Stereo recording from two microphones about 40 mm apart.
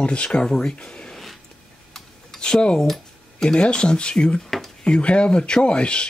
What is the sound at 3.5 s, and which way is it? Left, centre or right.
Speech, left.